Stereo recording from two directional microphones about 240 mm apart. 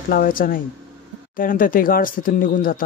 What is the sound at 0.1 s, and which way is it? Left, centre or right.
Speech, left.